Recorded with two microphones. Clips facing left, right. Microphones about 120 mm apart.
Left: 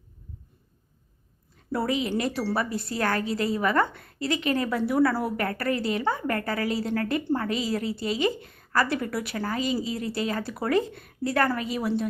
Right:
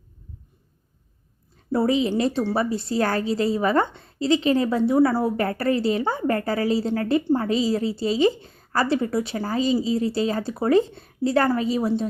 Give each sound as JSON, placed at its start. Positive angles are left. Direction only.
{"t": 1.7, "sound": "a woman's voice", "side_deg": -25}